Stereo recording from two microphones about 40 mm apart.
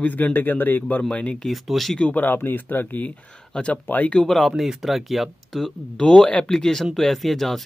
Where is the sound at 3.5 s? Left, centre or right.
Left.